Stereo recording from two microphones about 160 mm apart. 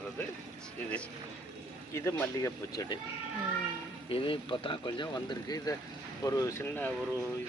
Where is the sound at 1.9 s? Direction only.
15° left (ahead or behind).